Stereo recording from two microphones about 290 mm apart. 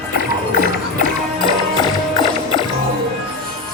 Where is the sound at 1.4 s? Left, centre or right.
Centre.